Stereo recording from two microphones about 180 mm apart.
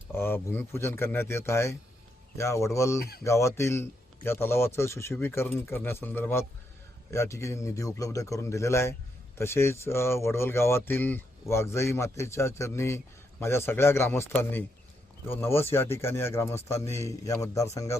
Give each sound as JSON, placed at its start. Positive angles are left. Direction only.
{"t": 0.1, "sound": "speech", "side_deg": 10}
{"t": 15.3, "sound": "speech", "side_deg": 15}